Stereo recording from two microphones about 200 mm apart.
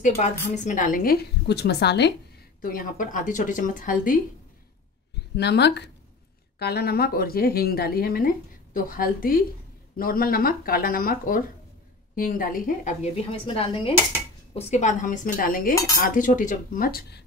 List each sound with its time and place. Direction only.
0.0 s a woman's voice: 35° left (ahead or behind); by 2.1 s 55° left (ahead or behind)
2.6 s speech: 45° left (ahead or behind)
5.3 s a woman's voice: 55° left (ahead or behind); by 13.1 s 40° left (ahead or behind)
13.5 s speech: 25° left (ahead or behind); by 17.2 s 50° left (ahead or behind)